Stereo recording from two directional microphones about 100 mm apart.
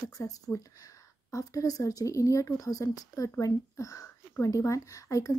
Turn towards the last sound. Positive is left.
turn(degrees=35)  # may be behind; listen again after turning